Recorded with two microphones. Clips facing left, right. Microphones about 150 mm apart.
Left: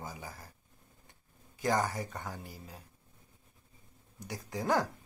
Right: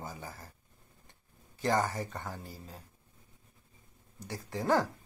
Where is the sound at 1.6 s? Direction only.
15° left (ahead or behind).